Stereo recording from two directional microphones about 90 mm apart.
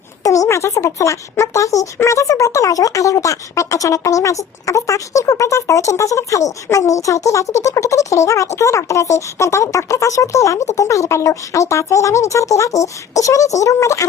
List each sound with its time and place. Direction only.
0.2 s speech: 40° left (ahead or behind)